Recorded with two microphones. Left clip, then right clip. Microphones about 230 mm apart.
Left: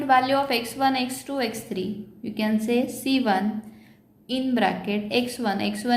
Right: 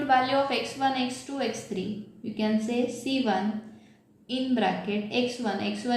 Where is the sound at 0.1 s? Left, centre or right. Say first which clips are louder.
Left 4 dB; left.